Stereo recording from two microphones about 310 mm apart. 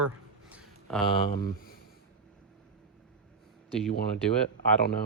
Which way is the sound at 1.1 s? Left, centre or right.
Centre.